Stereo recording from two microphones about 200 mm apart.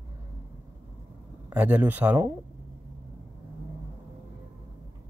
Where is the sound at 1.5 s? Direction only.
5° right (ahead or behind).